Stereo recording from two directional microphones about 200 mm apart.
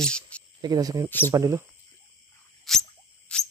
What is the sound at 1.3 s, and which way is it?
Speech, 15° right (ahead or behind).